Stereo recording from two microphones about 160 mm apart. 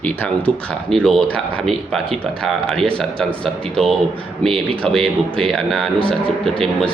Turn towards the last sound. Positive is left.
turn(degrees=5)  # may be behind; listen again after turning